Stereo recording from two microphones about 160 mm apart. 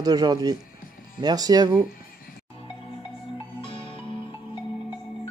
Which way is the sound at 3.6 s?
35° left (ahead or behind).